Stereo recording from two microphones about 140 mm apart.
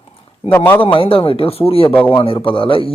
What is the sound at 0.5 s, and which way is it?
Speech, 15° left (ahead or behind).